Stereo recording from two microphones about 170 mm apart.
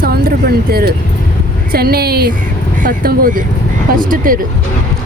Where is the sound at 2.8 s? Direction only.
55° right (ahead or behind).